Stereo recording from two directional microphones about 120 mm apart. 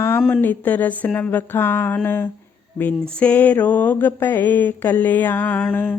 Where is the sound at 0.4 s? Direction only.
15° left (ahead or behind).